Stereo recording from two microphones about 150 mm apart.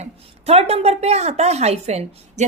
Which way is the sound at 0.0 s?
45° right (ahead or behind).